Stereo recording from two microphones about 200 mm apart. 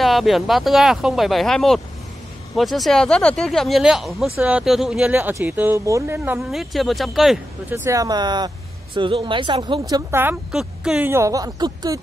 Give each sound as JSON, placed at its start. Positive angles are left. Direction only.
{"t": 0.0, "sound": "speech", "side_deg": 0}
{"t": 7.7, "sound": "speech", "side_deg": -15}